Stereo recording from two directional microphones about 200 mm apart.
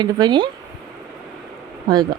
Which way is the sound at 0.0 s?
20° right (ahead or behind).